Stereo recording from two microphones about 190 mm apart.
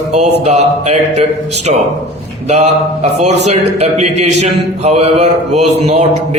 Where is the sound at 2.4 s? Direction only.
35° right (ahead or behind).